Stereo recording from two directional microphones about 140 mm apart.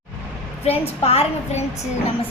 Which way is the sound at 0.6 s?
45° left (ahead or behind).